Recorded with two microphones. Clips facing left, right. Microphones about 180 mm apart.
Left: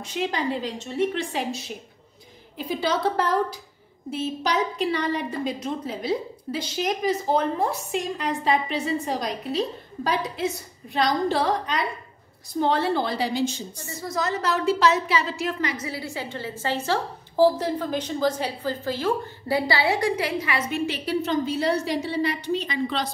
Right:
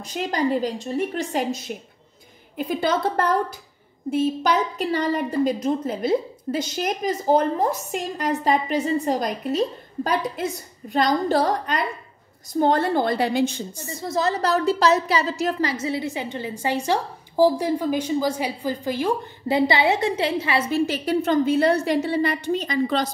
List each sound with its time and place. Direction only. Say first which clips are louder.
0.3 s a woman's voice: right 5 dB; 40° right (ahead or behind); by 13.6 s 55° right (ahead or behind)
14.0 s a woman's voice: right 4 dB; 30° right (ahead or behind)
20.8 s a woman's voice: right 4 dB; 45° right (ahead or behind)